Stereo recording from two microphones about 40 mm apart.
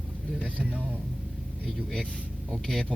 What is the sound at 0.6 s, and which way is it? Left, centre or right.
Speech, right.